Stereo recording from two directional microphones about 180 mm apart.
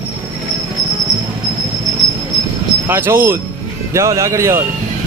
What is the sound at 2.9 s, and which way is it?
A man's voice, 15° right (ahead or behind).